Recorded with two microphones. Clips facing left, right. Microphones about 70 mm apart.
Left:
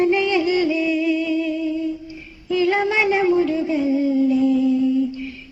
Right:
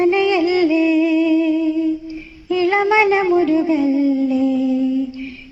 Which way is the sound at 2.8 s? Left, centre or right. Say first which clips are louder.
Right 4 dB; right.